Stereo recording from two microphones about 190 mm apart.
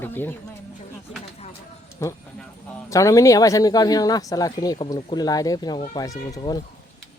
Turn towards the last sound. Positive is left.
turn(degrees=20)  # may be behind; listen again after turning